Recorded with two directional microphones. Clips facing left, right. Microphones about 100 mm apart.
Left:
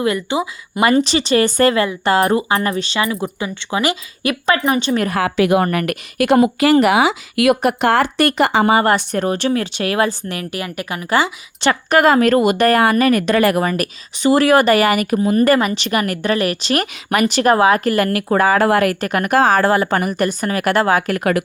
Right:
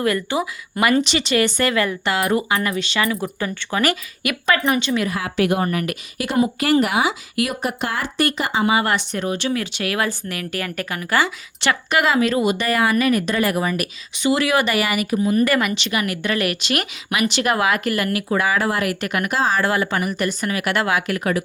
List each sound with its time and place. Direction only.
0.0 s speech: 20° left (ahead or behind)
4.2 s speech: 30° left (ahead or behind)
5.2 s a woman's voice: 85° left
5.6 s speech: 60° left (ahead or behind)
8.6 s speech: 40° left (ahead or behind)
10.5 s speech: 15° left (ahead or behind)
11.7 s speech: 45° left (ahead or behind)
13.1 s speech: 75° left (ahead or behind); by 16.3 s 45° left (ahead or behind)
16.3 s speech: 35° left (ahead or behind)